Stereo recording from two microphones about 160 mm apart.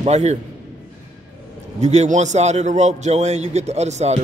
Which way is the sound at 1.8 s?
45° right (ahead or behind).